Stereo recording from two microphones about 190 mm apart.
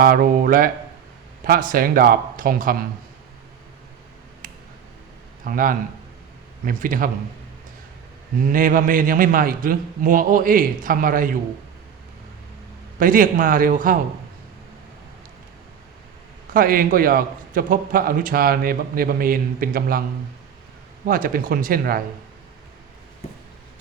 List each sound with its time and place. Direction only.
0.0 s a man's voice: 50° right (ahead or behind)
4.4 s a sound: 45° right (ahead or behind)
5.5 s a man's voice: 45° right (ahead or behind)
8.4 s a man's voice: 45° right (ahead or behind)
13.0 s a man's voice: 45° right (ahead or behind)
16.5 s a man's voice: 50° right (ahead or behind)
21.1 s a man's voice: 50° right (ahead or behind)